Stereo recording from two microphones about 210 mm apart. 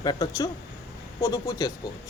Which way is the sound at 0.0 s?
20° left (ahead or behind).